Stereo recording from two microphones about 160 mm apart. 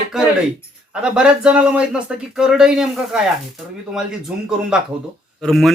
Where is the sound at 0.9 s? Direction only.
5° right (ahead or behind).